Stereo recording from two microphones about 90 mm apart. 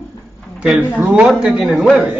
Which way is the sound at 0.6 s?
5° right (ahead or behind).